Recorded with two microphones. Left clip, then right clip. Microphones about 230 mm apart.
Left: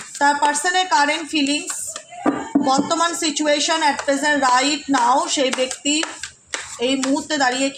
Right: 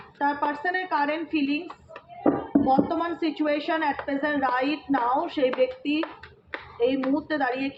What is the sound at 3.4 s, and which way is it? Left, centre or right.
Speech, left.